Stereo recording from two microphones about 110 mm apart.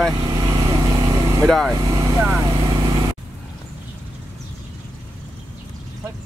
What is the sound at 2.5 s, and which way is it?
Vehicle, 50° right (ahead or behind).